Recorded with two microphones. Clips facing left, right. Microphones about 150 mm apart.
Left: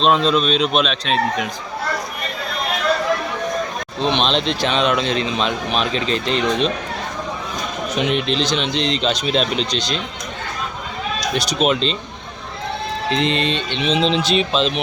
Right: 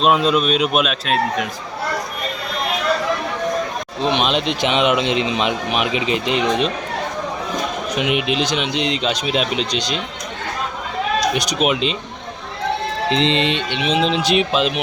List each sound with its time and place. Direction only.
0.0 s speech: 10° right (ahead or behind)
4.0 s speech: 10° right (ahead or behind)
7.9 s speech: 10° right (ahead or behind)
11.3 s speech: 10° right (ahead or behind)
13.1 s speech: 25° right (ahead or behind)